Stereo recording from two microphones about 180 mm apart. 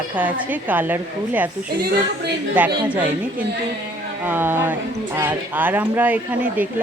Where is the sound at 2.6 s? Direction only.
10° right (ahead or behind).